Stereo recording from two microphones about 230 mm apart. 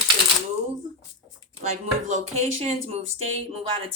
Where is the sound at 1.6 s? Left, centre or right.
Right.